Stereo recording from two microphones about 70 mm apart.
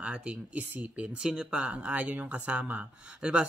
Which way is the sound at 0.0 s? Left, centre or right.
Centre.